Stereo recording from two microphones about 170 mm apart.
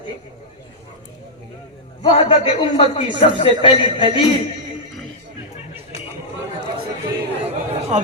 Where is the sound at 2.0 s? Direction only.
30° left (ahead or behind).